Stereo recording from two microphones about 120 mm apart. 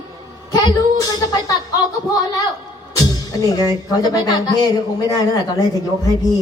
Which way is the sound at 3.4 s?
30° left (ahead or behind).